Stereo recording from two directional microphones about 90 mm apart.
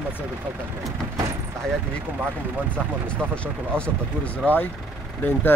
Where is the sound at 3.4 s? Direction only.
15° left (ahead or behind).